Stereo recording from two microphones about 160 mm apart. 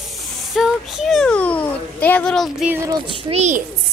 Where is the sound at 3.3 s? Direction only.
45° right (ahead or behind).